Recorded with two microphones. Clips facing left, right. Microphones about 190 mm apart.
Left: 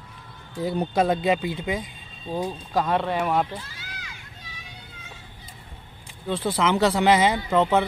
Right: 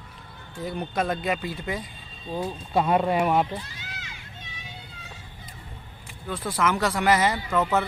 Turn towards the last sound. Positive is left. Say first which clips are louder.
# left 4 dB
turn(degrees=20)  # may be behind; listen again after turning